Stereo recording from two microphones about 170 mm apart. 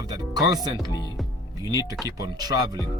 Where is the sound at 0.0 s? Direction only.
20° right (ahead or behind).